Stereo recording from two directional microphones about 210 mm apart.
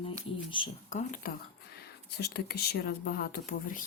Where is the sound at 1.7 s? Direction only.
50° left (ahead or behind).